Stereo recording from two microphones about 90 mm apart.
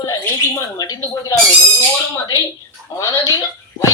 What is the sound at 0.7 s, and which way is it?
Speech, 45° left (ahead or behind).